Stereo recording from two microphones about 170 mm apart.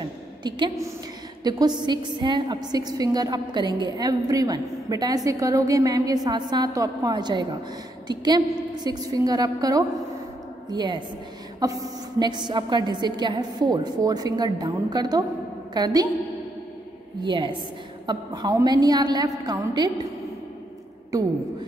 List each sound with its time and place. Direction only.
0.4 s a woman's voice: 25° right (ahead or behind)
17.2 s a woman's voice: 25° right (ahead or behind)